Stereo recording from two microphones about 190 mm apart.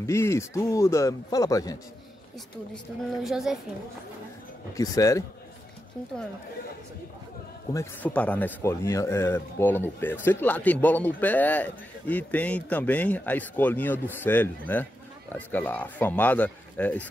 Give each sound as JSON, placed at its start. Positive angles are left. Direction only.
{"t": 0.0, "sound": "a man's voice", "side_deg": 15}
{"t": 2.7, "sound": "a woman's voice", "side_deg": 0}
{"t": 4.7, "sound": "a man's voice", "side_deg": 15}
{"t": 7.7, "sound": "a man's voice", "side_deg": 10}